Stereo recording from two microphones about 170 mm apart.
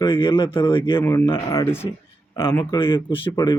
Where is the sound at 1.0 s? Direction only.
15° left (ahead or behind).